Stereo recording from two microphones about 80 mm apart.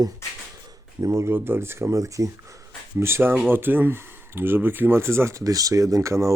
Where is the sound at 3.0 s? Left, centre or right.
Right.